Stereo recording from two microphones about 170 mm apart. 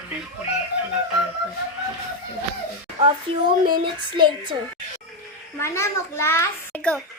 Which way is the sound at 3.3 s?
30° right (ahead or behind).